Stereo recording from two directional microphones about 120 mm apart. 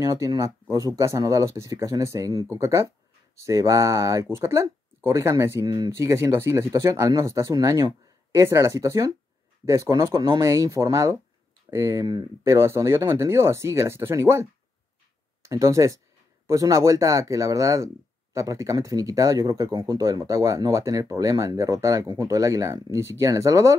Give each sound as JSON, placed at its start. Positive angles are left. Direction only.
{"t": 0.0, "sound": "speech", "side_deg": -30}